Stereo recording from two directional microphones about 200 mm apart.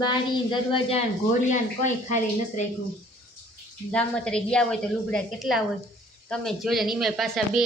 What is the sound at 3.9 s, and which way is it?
Speech, 5° left (ahead or behind).